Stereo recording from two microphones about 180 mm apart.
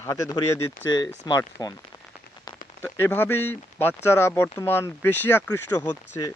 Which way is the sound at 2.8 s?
10° left (ahead or behind).